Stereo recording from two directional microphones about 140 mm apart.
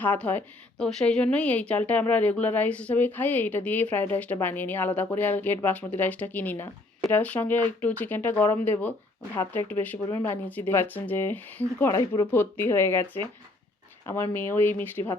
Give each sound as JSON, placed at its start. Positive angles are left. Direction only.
{"t": 0.0, "sound": "a woman's voice", "side_deg": 10}